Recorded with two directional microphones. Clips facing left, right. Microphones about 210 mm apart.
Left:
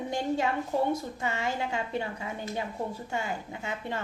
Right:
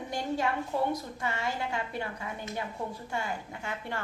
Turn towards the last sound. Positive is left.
turn(degrees=20)  # may be behind; listen again after turning